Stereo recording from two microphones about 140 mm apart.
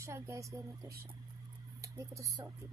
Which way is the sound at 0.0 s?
20° right (ahead or behind).